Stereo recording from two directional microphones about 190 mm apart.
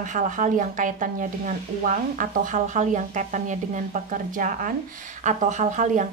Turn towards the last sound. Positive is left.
turn(degrees=-40)  # may be behind; listen again after turning